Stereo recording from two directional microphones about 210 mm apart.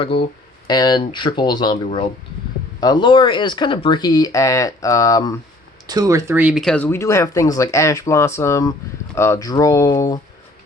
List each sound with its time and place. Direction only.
0.1 s speech: 25° left (ahead or behind)
5.9 s speech: 15° right (ahead or behind); by 10.2 s 15° left (ahead or behind)